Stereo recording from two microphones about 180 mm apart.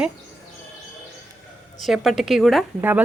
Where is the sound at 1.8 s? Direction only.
Centre (ahead or behind).